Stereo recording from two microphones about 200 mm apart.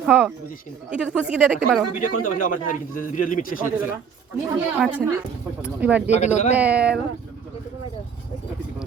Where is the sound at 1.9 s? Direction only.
45° left (ahead or behind).